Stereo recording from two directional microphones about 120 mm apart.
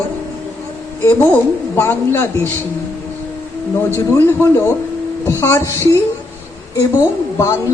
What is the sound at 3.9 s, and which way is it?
A man's voice, 20° left (ahead or behind).